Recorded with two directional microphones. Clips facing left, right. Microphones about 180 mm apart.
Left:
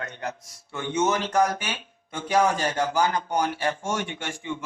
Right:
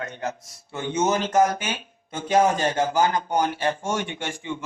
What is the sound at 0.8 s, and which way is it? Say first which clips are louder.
Speech: right 1 dB; 40° right (ahead or behind).